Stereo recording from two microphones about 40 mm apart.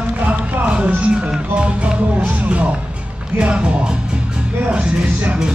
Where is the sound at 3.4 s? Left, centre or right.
Right.